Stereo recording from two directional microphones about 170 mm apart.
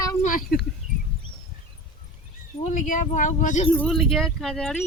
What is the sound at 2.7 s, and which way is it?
Speech, 50° left (ahead or behind).